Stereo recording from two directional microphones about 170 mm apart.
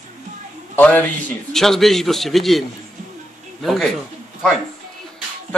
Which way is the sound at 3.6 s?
Centre (ahead or behind).